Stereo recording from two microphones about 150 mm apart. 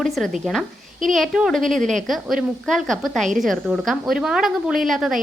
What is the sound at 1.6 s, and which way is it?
Speech, 60° right (ahead or behind).